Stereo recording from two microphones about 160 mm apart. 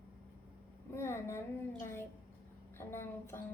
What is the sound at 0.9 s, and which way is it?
A child's voice, 15° left (ahead or behind).